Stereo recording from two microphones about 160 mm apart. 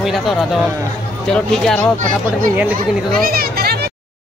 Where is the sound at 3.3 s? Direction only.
70° right (ahead or behind).